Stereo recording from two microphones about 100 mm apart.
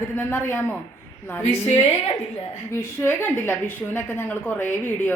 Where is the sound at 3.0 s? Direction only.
25° left (ahead or behind).